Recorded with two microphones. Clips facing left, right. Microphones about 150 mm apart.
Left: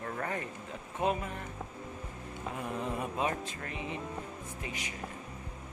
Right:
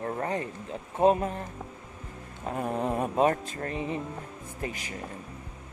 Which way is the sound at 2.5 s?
45° right (ahead or behind).